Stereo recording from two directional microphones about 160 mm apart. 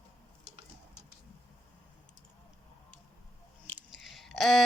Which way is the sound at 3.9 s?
Centre (ahead or behind).